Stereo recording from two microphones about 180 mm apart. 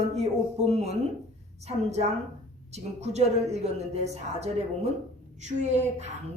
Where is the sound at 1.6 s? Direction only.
35° right (ahead or behind).